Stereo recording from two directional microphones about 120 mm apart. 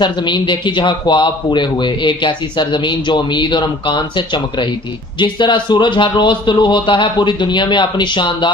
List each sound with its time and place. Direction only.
0.0 s speech: 40° left (ahead or behind)